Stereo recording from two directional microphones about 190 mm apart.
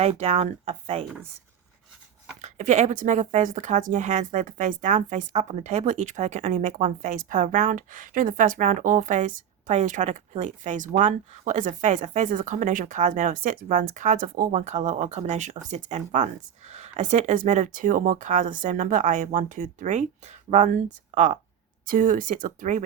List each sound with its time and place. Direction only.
0.0 s speech: 35° right (ahead or behind)
2.4 s speech: 40° right (ahead or behind)